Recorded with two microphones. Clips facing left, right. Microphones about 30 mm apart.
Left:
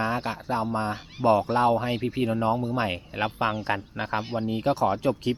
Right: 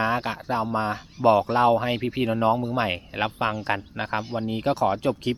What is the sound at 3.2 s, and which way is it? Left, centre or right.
Speech, centre.